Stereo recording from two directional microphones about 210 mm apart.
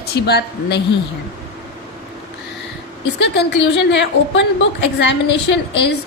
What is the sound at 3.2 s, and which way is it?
A woman's voice, 55° left (ahead or behind).